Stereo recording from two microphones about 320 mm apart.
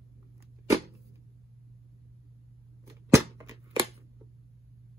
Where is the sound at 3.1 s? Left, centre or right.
Centre.